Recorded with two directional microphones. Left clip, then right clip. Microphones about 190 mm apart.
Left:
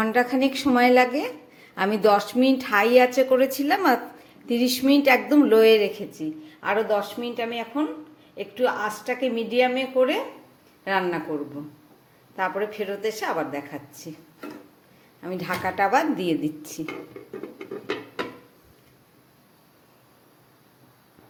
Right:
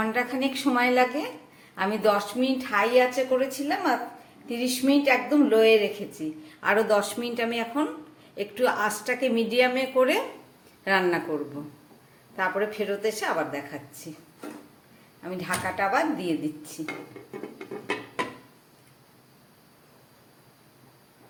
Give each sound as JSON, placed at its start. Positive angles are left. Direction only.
{"t": 0.0, "sound": "a woman's voice", "side_deg": 30}
{"t": 6.2, "sound": "a woman's voice", "side_deg": 15}
{"t": 6.6, "sound": "a woman's voice", "side_deg": 0}
{"t": 12.4, "sound": "a woman's voice", "side_deg": 5}
{"t": 15.2, "sound": "a woman's voice", "side_deg": 30}